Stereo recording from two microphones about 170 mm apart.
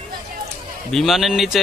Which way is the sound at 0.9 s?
Centre (ahead or behind).